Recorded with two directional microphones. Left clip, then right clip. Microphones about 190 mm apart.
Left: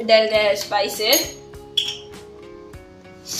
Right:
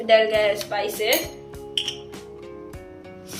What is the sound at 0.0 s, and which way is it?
A woman's voice, 15° left (ahead or behind).